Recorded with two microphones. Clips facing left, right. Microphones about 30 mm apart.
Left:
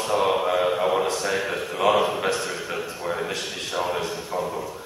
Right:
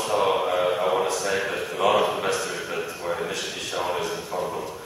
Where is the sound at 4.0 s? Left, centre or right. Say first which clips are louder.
Even; left.